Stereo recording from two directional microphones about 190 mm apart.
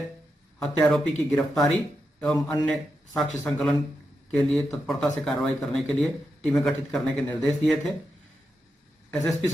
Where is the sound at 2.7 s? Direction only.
5° left (ahead or behind).